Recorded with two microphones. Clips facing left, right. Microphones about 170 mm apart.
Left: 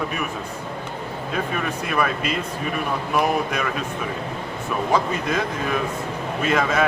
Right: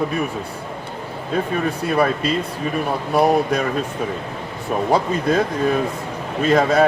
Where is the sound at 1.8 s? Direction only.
35° right (ahead or behind).